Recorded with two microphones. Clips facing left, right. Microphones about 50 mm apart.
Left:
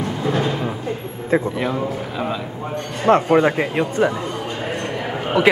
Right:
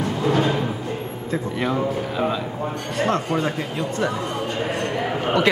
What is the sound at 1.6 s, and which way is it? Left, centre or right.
Speech, centre.